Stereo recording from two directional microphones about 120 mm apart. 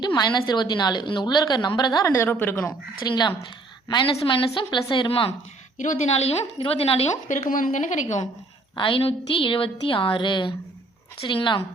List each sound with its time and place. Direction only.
0.0 s a woman's voice: 40° left (ahead or behind); by 2.7 s 15° left (ahead or behind)
3.0 s a woman's voice: 35° left (ahead or behind)
4.0 s a woman's voice: 45° left (ahead or behind)
5.7 s speech: 90° left; by 6.3 s 65° left (ahead or behind)
6.6 s a woman's voice: 55° left (ahead or behind); by 8.0 s 90° left
8.7 s a woman's voice: 45° left (ahead or behind)